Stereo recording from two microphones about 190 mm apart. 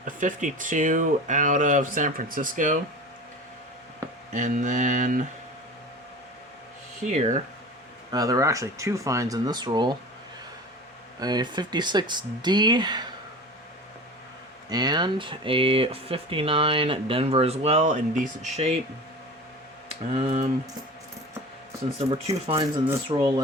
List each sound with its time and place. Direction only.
0.0 s speech: 45° right (ahead or behind)
4.3 s mantra: 40° right (ahead or behind)
7.0 s mantra: 40° right (ahead or behind)
8.1 s speech: 20° right (ahead or behind)
11.2 s speech: 20° right (ahead or behind)
14.7 s speech: 20° right (ahead or behind)
20.1 s mantra: 35° right (ahead or behind)
21.9 s mantra: 30° right (ahead or behind)
23.0 s speech: 25° right (ahead or behind)